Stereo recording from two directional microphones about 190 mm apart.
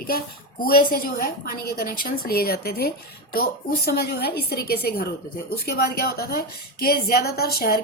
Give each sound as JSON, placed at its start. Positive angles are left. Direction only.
{"t": 0.6, "sound": "a woman's voice", "side_deg": 50}